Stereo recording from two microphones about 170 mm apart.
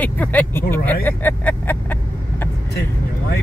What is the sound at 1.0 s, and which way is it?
Vehicle, 10° left (ahead or behind).